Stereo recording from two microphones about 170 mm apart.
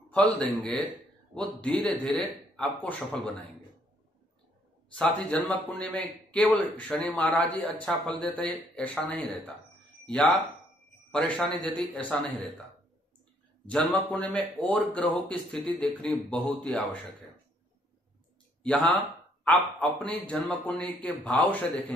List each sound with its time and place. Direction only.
0.1 s a man's voice: 5° left (ahead or behind)
4.9 s a man's voice: 5° left (ahead or behind)
11.1 s a man's voice: 5° left (ahead or behind)
13.7 s a man's voice: 5° left (ahead or behind)
18.6 s a man's voice: 5° left (ahead or behind)